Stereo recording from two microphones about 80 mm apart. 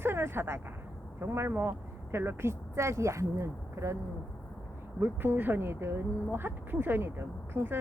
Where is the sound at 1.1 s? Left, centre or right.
Right.